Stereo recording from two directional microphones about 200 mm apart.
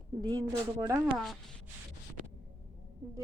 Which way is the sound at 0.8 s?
15° right (ahead or behind).